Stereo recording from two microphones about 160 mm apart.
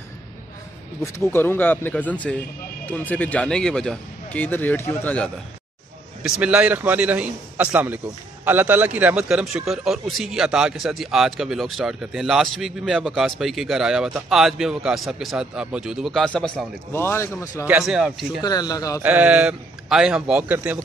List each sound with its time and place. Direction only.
1.0 s speech: 15° left (ahead or behind)
6.2 s a man's voice: 5° right (ahead or behind)
16.9 s speech: 15° left (ahead or behind)
17.6 s a man's voice: 5° right (ahead or behind)
18.4 s a man's voice: 25° left (ahead or behind)
19.0 s a man's voice: 10° right (ahead or behind)